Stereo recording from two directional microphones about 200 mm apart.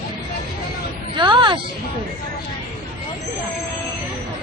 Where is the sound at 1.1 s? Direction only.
25° right (ahead or behind).